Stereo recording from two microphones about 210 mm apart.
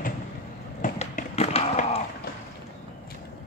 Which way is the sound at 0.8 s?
35° left (ahead or behind).